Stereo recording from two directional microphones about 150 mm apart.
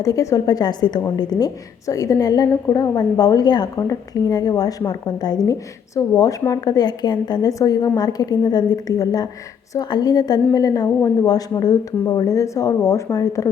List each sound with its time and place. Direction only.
0.0 s a woman's voice: 25° left (ahead or behind)